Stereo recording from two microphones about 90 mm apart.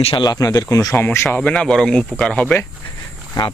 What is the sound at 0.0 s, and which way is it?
Speech, 85° left.